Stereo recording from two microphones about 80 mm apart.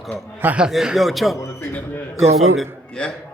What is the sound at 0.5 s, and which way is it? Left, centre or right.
Speech, centre.